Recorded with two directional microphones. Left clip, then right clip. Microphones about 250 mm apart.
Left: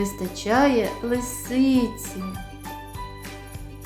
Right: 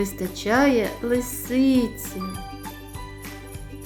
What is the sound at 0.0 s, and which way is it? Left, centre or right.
A woman's voice, centre.